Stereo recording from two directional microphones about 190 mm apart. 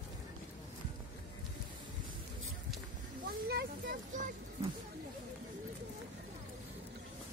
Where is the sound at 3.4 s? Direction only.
55° right (ahead or behind).